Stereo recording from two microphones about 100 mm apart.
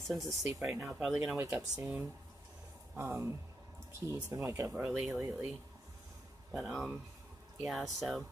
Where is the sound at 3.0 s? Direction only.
25° right (ahead or behind).